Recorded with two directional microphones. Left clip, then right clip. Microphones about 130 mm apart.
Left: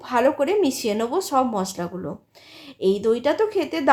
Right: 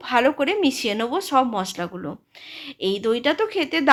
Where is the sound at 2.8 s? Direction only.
10° right (ahead or behind).